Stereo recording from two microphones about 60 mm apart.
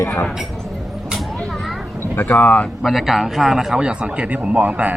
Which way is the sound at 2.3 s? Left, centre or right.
Left.